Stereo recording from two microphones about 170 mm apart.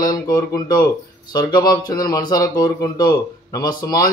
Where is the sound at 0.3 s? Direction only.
20° left (ahead or behind).